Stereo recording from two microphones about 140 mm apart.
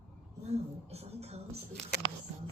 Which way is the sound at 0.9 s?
50° right (ahead or behind).